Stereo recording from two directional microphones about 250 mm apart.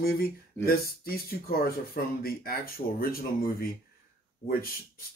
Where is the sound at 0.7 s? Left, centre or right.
Left.